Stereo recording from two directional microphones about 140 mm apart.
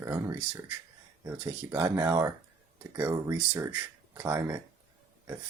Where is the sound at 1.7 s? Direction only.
20° right (ahead or behind).